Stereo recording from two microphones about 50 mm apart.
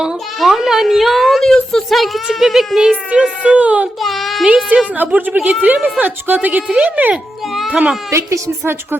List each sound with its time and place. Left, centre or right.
0.3 s a sound: centre
1.5 s a sound: centre
1.9 s a woman's voice: centre
3.4 s a child's voice: right
4.0 s a woman's voice: centre
4.4 s a child's voice: right
7.7 s a child's voice: right
8.1 s a woman's voice: right